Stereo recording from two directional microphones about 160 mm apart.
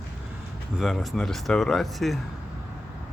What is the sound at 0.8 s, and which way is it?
Speech, centre (ahead or behind).